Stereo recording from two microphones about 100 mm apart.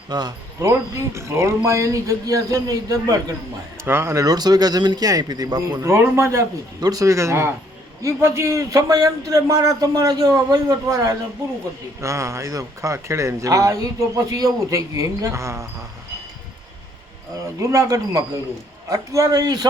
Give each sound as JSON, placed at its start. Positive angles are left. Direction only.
{"t": 0.1, "sound": "speech", "side_deg": -45}
{"t": 0.7, "sound": "a man's voice", "side_deg": -30}
{"t": 3.8, "sound": "a man's voice", "side_deg": -25}
{"t": 5.8, "sound": "a man's voice", "side_deg": -25}
{"t": 6.7, "sound": "a man's voice", "side_deg": -40}
{"t": 17.6, "sound": "a man's voice", "side_deg": -35}